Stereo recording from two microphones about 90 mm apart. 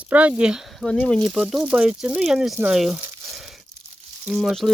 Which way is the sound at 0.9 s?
15° left (ahead or behind).